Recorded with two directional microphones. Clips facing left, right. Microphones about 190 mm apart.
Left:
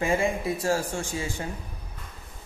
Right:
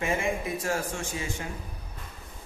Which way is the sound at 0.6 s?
30° left (ahead or behind).